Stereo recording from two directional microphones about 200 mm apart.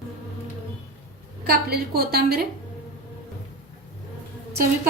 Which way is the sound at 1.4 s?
50° right (ahead or behind).